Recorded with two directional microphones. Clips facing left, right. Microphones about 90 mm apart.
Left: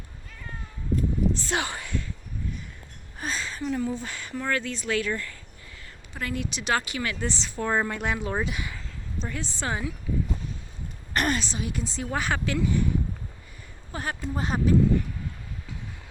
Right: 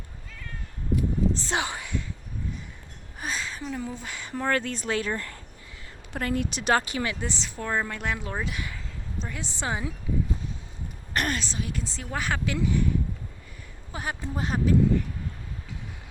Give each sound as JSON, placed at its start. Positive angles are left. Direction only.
{"t": 1.3, "sound": "a sound", "side_deg": -25}
{"t": 3.2, "sound": "a sound", "side_deg": -5}
{"t": 4.4, "sound": "speech", "side_deg": -45}
{"t": 4.9, "sound": "speech", "side_deg": -35}
{"t": 7.0, "sound": "speech", "side_deg": -15}
{"t": 7.6, "sound": "speech", "side_deg": 10}
{"t": 9.2, "sound": "speech", "side_deg": -15}
{"t": 11.1, "sound": "speech", "side_deg": 0}
{"t": 13.9, "sound": "speech", "side_deg": -10}